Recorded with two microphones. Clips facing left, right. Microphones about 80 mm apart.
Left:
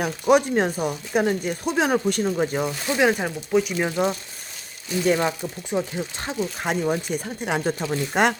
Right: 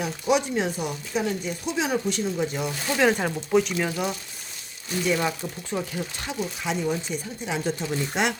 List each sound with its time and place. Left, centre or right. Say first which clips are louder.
0.0 s speech: left 5 dB; left
2.9 s speech: left 1 dB; centre
3.8 s speech: left 4 dB; left
5.1 s speech: left 3 dB; left
6.6 s speech: left 3 dB; left